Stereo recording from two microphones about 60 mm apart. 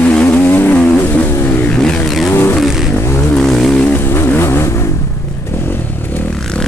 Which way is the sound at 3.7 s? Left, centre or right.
Centre.